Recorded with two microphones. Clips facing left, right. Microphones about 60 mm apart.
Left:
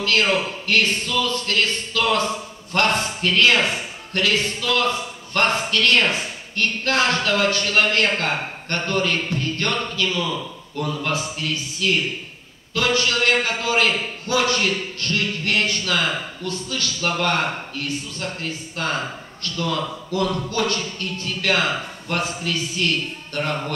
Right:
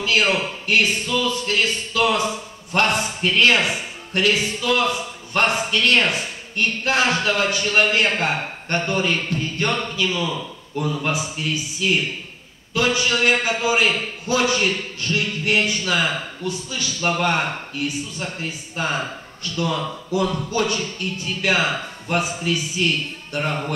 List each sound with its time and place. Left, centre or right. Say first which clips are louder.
0.0 s a man's voice: even; centre
9.4 s music: right 1 dB; centre
10.8 s a man's voice: right 1 dB; centre